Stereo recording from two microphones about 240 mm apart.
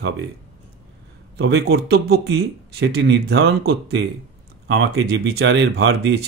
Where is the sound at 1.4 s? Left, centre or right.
Right.